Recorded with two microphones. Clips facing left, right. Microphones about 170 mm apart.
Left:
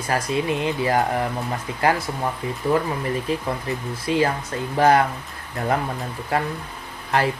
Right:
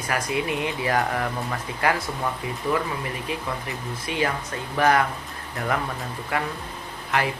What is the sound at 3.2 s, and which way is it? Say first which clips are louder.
Speech: left 5 dB; 35° left (ahead or behind).